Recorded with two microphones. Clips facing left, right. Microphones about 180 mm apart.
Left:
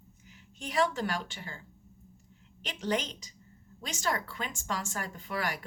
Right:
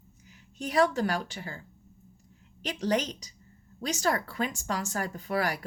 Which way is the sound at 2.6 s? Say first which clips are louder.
Right 4 dB; 40° right (ahead or behind).